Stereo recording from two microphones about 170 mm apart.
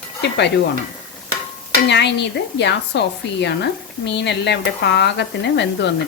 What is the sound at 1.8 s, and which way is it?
Speech, 90° left.